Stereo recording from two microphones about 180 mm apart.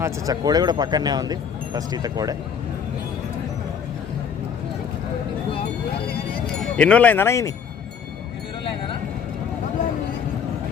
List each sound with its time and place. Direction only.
0.0 s speech: 20° right (ahead or behind)
6.6 s speech: 5° left (ahead or behind)